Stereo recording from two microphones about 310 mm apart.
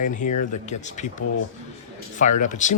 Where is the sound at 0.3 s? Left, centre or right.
Left.